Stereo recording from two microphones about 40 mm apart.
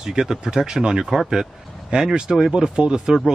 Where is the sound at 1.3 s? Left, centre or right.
Centre.